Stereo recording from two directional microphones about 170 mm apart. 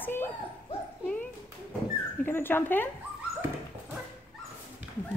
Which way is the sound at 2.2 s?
15° left (ahead or behind).